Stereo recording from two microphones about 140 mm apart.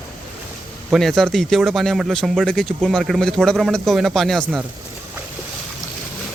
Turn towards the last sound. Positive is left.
turn(degrees=0)  # may be behind; listen again after turning